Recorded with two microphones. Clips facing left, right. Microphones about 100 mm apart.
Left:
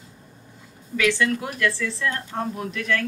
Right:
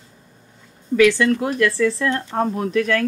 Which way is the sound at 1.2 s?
45° right (ahead or behind).